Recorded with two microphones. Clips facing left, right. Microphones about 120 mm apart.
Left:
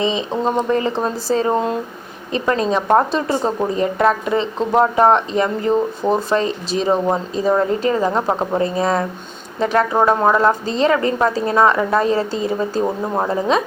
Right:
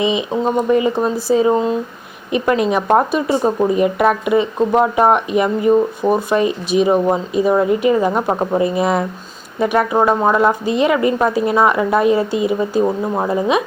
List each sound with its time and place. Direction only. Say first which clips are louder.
0.0 s speech: right 2 dB; 15° right (ahead or behind)
1.5 s speech: right 2 dB; centre (ahead or behind)
2.3 s speech: right 2 dB; 15° right (ahead or behind)